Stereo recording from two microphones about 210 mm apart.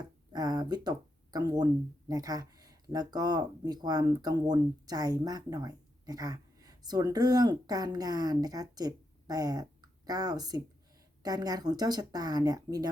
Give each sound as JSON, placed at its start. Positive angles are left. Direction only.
{"t": 0.3, "sound": "speech", "side_deg": -20}